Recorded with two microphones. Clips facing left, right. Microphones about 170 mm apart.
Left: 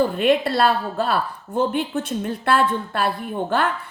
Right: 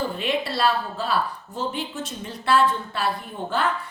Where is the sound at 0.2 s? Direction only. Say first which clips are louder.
Left 6 dB; 55° left (ahead or behind).